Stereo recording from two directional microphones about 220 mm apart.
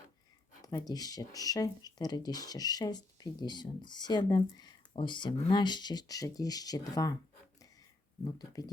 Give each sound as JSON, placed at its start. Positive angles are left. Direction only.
{"t": 0.6, "sound": "speech", "side_deg": 15}
{"t": 8.2, "sound": "speech", "side_deg": 20}